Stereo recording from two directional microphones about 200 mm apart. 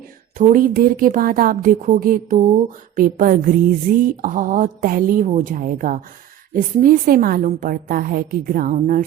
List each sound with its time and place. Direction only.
0.3 s a woman's voice: 40° right (ahead or behind)